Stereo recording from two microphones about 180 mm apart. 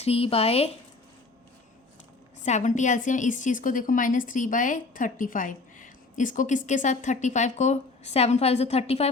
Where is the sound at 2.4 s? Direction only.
40° left (ahead or behind).